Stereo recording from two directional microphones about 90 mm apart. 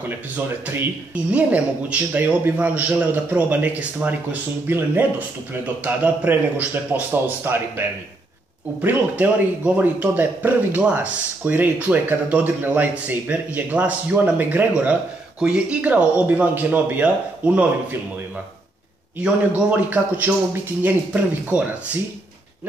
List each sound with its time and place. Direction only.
1.3 s a man's voice: 15° right (ahead or behind)
8.8 s a man's voice: 20° right (ahead or behind)
19.2 s a man's voice: 15° right (ahead or behind)